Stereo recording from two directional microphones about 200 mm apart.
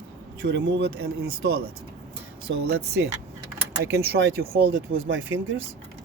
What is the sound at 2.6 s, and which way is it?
Speech, 55° right (ahead or behind).